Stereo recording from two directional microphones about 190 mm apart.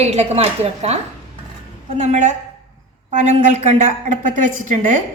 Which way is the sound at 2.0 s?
40° right (ahead or behind).